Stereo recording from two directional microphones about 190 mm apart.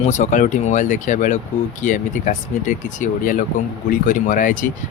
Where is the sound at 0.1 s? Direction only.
40° left (ahead or behind).